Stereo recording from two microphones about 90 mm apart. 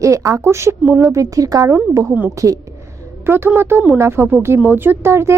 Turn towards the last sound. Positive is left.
turn(degrees=-30)  # may be behind; listen again after turning